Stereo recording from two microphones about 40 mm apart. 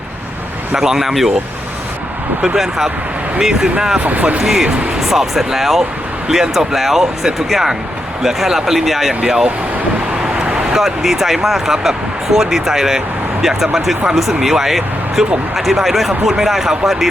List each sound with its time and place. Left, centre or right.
0.8 s speech: centre
2.6 s speech: centre
4.0 s speech: right
4.4 s speech: centre
9.2 s speech: centre
10.7 s speech: centre